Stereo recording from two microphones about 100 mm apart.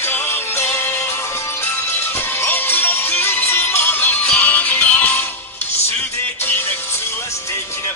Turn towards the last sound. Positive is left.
turn(degrees=20)  # may be behind; listen again after turning